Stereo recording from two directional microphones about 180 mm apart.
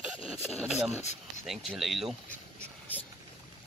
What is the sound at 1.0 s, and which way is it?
Speech, 40° left (ahead or behind).